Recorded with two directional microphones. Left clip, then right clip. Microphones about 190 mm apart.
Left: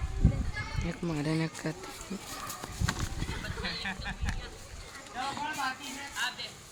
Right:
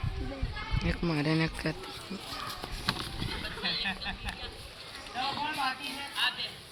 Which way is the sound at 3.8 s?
15° right (ahead or behind).